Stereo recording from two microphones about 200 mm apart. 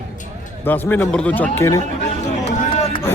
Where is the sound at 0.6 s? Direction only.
10° left (ahead or behind).